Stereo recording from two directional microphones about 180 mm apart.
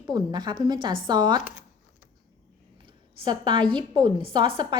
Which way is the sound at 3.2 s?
25° right (ahead or behind).